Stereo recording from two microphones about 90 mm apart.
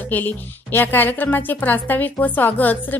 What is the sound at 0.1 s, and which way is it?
A woman's voice, 20° left (ahead or behind).